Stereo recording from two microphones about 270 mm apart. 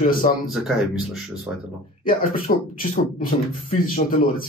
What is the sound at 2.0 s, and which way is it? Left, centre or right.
Speech, left.